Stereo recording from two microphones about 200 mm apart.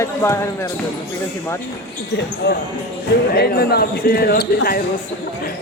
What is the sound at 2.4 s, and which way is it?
Speech, 55° left (ahead or behind).